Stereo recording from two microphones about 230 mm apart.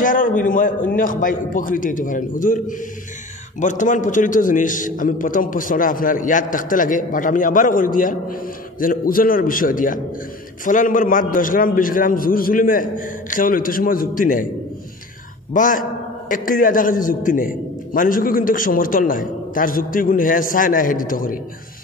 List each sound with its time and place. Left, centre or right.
0.0 s a man's voice: left
15.5 s a man's voice: left